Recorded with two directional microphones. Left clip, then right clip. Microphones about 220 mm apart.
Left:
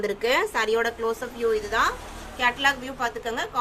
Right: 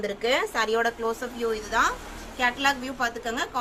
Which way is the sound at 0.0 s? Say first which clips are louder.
Left 2 dB; 20° left (ahead or behind).